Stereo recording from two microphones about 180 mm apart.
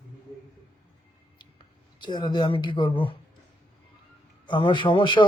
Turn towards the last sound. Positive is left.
turn(degrees=25)  # may be behind; listen again after turning